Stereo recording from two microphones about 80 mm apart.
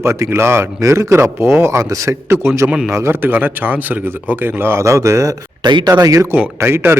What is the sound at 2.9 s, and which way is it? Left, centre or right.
A man's voice, right.